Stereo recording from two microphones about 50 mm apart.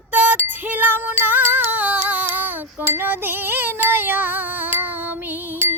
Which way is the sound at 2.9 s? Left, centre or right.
Right.